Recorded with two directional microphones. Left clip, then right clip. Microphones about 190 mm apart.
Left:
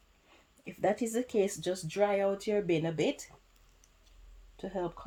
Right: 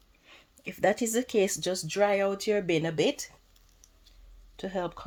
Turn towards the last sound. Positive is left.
turn(degrees=-40)  # may be behind; listen again after turning